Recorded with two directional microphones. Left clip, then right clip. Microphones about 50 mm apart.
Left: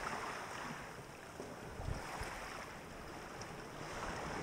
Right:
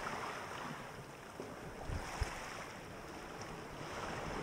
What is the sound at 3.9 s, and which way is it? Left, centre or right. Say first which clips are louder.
Waves: even; left.